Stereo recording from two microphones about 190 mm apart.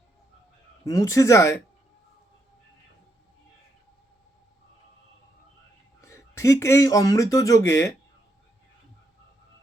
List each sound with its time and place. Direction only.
0.9 s speech: 20° left (ahead or behind)
6.0 s speech: 15° left (ahead or behind)